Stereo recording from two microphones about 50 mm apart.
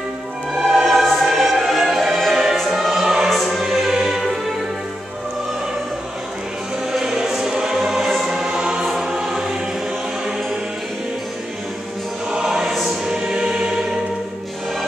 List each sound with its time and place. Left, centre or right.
0.7 s music: centre
6.9 s music: centre
12.3 s music: centre
13.1 s music: centre